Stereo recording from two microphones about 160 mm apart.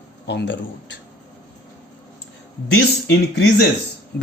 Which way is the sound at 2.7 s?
90° left.